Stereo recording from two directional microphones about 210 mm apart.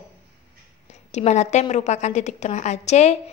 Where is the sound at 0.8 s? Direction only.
35° left (ahead or behind).